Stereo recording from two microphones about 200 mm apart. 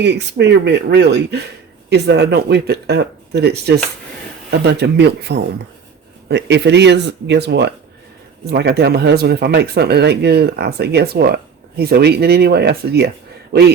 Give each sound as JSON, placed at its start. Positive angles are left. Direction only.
{"t": 0.0, "sound": "speech", "side_deg": -60}
{"t": 4.6, "sound": "a man's voice", "side_deg": -60}